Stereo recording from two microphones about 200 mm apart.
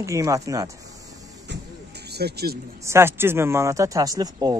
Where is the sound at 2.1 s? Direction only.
55° right (ahead or behind).